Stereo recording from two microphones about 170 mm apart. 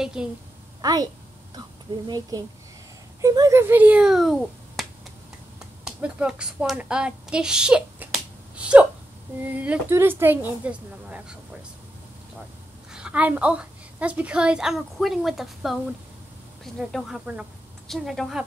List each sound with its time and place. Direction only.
0.0 s a woman's voice: 5° right (ahead or behind)
0.7 s a woman's voice: 20° right (ahead or behind)
2.0 s a child's voice: 20° right (ahead or behind); by 4.8 s centre (ahead or behind)
5.9 s a woman's voice: 10° right (ahead or behind)
12.9 s a woman's voice: 5° right (ahead or behind)